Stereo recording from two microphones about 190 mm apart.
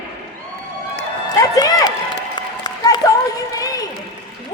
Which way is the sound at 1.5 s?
20° left (ahead or behind).